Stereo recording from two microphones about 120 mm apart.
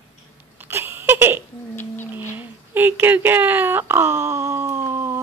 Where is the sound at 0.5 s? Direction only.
20° right (ahead or behind).